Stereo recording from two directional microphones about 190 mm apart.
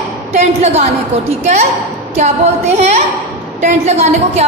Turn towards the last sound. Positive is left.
turn(degrees=-35)  # may be behind; listen again after turning